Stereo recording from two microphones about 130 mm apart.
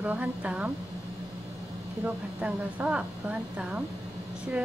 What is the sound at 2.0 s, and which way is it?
A woman's voice, 10° right (ahead or behind).